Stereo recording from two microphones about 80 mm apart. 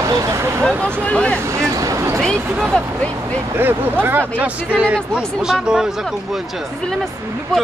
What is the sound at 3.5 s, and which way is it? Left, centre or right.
Speech, right.